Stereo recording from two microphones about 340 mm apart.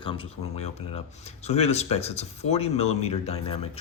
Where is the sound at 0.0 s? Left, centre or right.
Centre.